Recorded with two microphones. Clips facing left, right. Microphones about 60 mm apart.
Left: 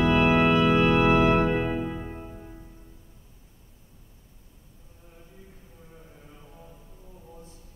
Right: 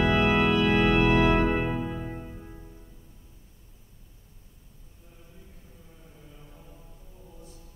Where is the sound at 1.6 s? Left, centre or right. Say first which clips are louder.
Left 1 dB; centre.